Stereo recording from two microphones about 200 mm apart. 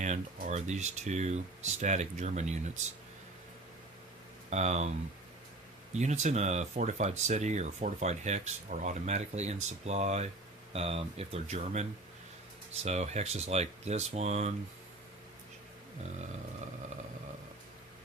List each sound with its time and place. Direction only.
0.0 s speech: 35° right (ahead or behind)
4.4 s speech: 35° right (ahead or behind)